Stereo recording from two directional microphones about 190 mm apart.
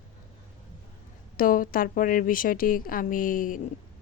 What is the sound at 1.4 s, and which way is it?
Speech, 45° left (ahead or behind).